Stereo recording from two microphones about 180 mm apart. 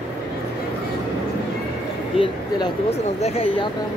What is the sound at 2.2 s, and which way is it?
Speech, 30° left (ahead or behind).